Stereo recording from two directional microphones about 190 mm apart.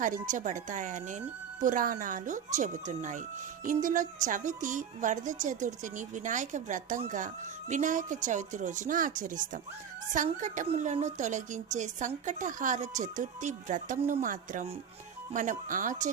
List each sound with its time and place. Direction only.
0.0 s a woman's voice: 45° right (ahead or behind)